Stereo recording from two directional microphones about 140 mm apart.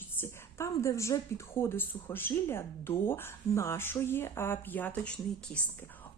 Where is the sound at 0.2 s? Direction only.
20° left (ahead or behind).